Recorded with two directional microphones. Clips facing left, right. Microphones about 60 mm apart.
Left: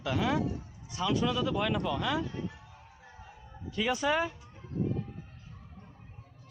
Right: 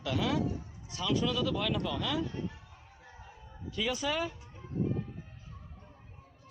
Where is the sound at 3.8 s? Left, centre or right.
Left.